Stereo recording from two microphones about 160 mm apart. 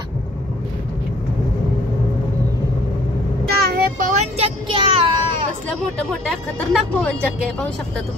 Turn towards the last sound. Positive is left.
turn(degrees=5)  # may be behind; listen again after turning